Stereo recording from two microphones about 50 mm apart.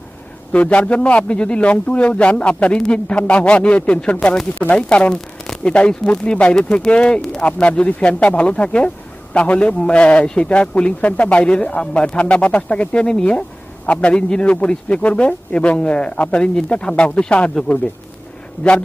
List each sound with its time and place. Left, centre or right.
0.5 s speech: left
4.6 s speech: centre
5.6 s speech: centre